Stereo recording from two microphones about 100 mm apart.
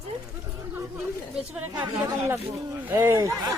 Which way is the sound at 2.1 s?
30° right (ahead or behind).